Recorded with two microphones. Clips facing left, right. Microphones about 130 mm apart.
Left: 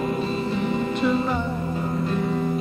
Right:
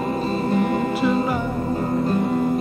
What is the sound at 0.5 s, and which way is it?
Music, 50° right (ahead or behind).